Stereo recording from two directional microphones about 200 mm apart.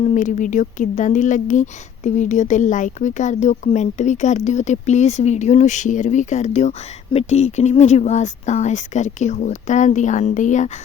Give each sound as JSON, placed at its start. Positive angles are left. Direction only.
{"t": 0.0, "sound": "speech", "side_deg": 35}